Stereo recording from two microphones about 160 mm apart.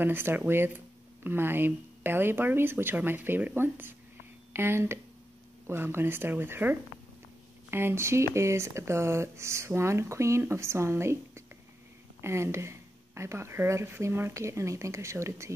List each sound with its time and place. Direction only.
0.0 s speech: 15° right (ahead or behind)